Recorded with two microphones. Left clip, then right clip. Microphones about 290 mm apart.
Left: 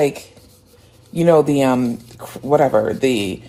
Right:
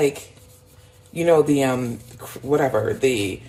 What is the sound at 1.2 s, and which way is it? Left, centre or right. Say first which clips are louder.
Speech: left 3 dB; left.